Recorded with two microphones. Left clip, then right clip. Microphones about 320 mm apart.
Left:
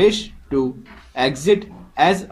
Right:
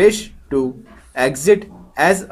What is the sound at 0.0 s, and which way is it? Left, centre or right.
Speech, centre.